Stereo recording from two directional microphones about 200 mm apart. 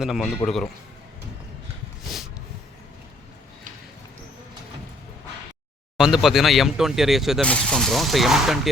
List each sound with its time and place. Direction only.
0.0 s speech: centre (ahead or behind)
6.0 s speech: centre (ahead or behind)